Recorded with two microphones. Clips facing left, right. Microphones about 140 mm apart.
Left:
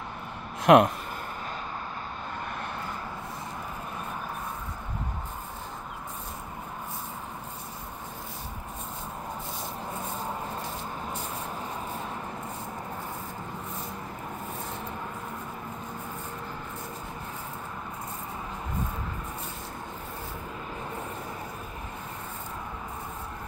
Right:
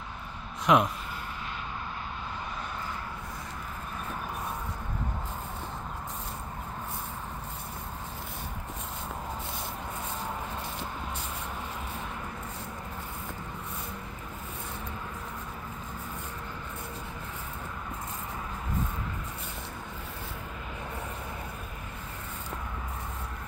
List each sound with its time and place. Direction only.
0.7 s speech: 55° left (ahead or behind)